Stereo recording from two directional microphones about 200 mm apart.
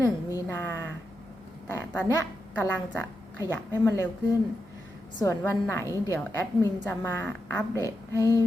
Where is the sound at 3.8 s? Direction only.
10° left (ahead or behind).